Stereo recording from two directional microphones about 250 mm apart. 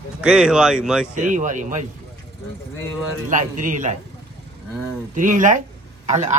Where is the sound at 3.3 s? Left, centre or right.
Right.